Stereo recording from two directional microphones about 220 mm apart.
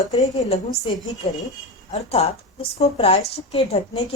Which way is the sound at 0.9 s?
25° left (ahead or behind).